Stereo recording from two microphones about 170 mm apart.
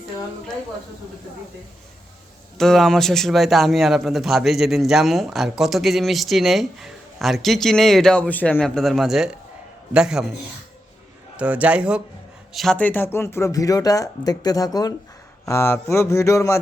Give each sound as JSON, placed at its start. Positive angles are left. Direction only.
{"t": 2.6, "sound": "a man's voice", "side_deg": 0}
{"t": 11.3, "sound": "speech", "side_deg": -10}
{"t": 12.5, "sound": "speech", "side_deg": 5}
{"t": 15.4, "sound": "a sound", "side_deg": 15}